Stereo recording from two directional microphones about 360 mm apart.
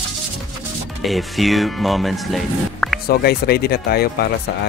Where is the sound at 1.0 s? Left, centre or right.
Centre.